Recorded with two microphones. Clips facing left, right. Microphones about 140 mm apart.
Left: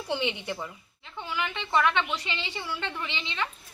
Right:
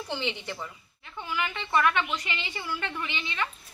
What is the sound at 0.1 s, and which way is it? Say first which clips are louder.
A woman's voice: left 4 dB; 10° left (ahead or behind).